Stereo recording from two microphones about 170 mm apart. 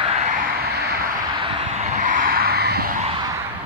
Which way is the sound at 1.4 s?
40° right (ahead or behind).